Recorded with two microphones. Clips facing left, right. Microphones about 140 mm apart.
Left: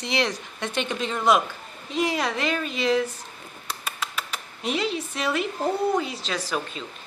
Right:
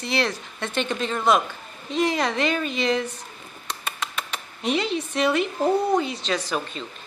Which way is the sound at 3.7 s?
5° left (ahead or behind).